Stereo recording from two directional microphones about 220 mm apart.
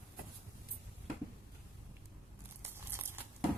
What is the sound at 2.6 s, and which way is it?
Tearing, 10° right (ahead or behind).